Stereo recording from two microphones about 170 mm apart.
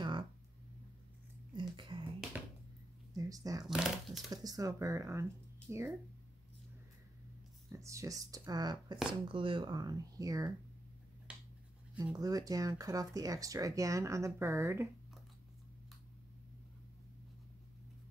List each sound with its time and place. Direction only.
1.5 s a sound: 25° right (ahead or behind)
2.3 s music: 10° right (ahead or behind)
3.2 s speech: 20° right (ahead or behind)
3.6 s speech: 5° right (ahead or behind)
4.3 s speech: 20° right (ahead or behind)
7.7 s speech: 20° right (ahead or behind)
11.3 s finger snapping: 5° right (ahead or behind)
12.2 s speech: 20° right (ahead or behind)